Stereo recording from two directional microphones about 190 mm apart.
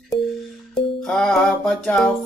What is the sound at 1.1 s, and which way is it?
Music, 5° left (ahead or behind).